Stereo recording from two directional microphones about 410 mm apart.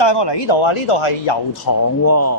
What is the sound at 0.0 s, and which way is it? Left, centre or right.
Speech, left.